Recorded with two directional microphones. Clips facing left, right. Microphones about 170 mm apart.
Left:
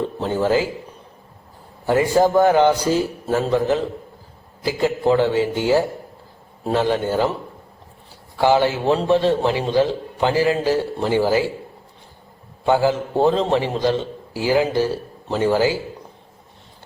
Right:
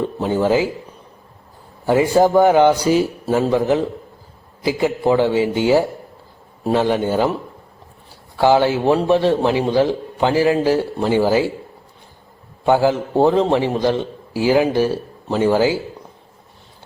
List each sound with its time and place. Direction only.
0.2 s a man's voice: 15° right (ahead or behind)
1.9 s a man's voice: 15° right (ahead or behind)
8.4 s a man's voice: 15° right (ahead or behind)
12.6 s a man's voice: 15° right (ahead or behind)